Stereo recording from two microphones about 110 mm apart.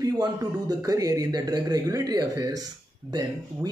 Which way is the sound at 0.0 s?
35° right (ahead or behind).